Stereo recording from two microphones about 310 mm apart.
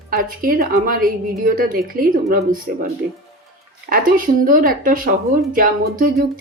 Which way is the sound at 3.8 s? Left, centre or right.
Right.